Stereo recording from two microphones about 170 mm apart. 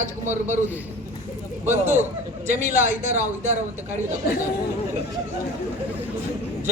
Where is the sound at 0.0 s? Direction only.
45° right (ahead or behind).